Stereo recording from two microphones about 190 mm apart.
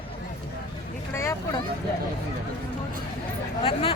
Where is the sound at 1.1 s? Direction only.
15° left (ahead or behind).